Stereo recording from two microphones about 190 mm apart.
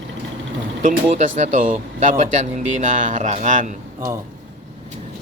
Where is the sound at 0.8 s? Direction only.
40° right (ahead or behind).